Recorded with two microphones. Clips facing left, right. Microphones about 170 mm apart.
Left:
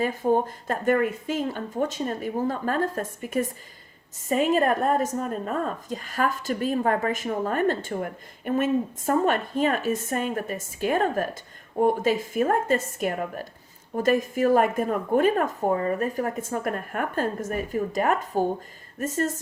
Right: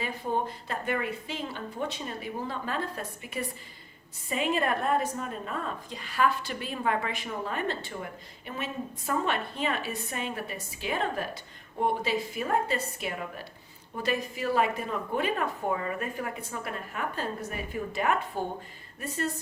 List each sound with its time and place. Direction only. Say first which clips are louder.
0.0 s a woman's voice: left 8 dB; 45° left (ahead or behind)